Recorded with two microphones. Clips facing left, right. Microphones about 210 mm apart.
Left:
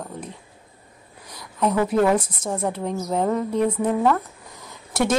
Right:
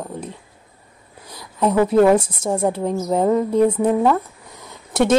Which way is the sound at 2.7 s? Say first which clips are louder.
Right 4 dB; 35° right (ahead or behind).